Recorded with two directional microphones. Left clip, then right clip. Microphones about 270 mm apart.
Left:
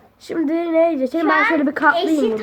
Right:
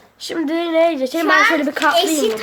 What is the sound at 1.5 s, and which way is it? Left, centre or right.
Speech, centre.